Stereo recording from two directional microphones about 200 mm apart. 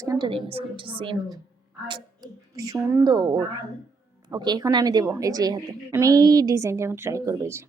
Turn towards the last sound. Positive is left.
turn(degrees=-15)  # may be behind; listen again after turning